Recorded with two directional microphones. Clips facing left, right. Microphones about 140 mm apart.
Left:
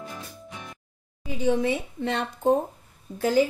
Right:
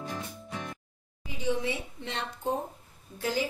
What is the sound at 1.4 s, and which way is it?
Speech, 50° left (ahead or behind).